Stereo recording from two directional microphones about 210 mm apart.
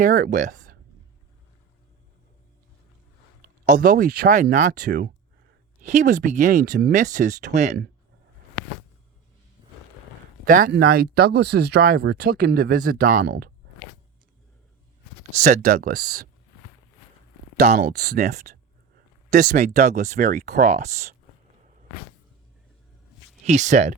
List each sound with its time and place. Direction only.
0.0 s speech: 40° right (ahead or behind)
3.4 s speech: 40° right (ahead or behind)
10.4 s speech: 40° right (ahead or behind)
13.2 s speech: 50° right (ahead or behind)
15.4 s speech: 35° right (ahead or behind)
17.7 s speech: 50° right (ahead or behind)
18.2 s speech: 35° right (ahead or behind)
19.3 s speech: 45° right (ahead or behind)
19.5 s speech: 35° right (ahead or behind)
23.5 s speech: 35° right (ahead or behind)